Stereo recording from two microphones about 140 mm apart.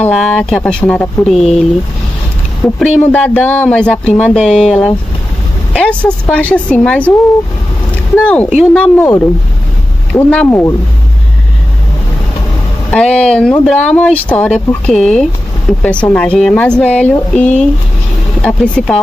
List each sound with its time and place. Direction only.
0.0 s speech: 5° left (ahead or behind)
8.7 s speech: 10° left (ahead or behind)
12.9 s speech: 5° left (ahead or behind)